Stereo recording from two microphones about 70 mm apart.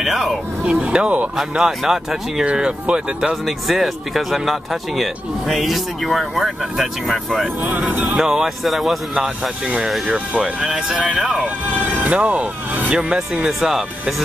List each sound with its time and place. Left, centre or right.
0.0 s a sound: centre
0.7 s speech: centre
1.6 s speech: centre
3.4 s speech: centre
7.6 s speech: right
8.2 s speech: centre
10.0 s speech: centre
10.4 s speech: centre
11.4 s speech: right
13.5 s speech: centre